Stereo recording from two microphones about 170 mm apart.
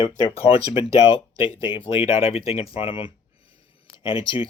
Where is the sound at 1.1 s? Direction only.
35° left (ahead or behind).